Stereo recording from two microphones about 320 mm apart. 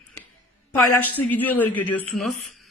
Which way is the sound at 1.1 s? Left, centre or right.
Centre.